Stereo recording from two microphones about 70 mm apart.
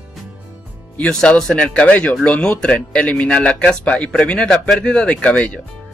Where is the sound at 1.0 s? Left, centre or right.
Centre.